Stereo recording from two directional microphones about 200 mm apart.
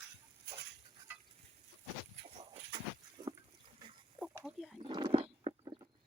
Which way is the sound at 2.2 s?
30° right (ahead or behind).